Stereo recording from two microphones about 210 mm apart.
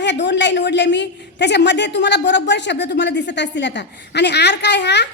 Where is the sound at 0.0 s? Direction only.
55° left (ahead or behind).